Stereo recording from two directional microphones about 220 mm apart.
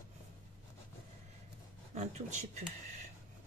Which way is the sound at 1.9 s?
30° right (ahead or behind).